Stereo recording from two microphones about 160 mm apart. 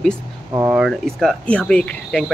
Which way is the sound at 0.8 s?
Centre (ahead or behind).